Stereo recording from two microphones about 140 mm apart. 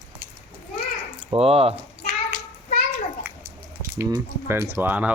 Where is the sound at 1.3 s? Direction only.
45° right (ahead or behind).